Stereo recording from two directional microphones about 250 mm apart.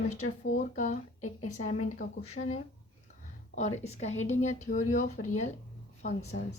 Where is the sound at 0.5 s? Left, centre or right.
Left.